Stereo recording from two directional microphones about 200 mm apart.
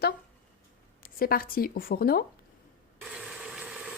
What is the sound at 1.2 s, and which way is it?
Speech, 45° left (ahead or behind).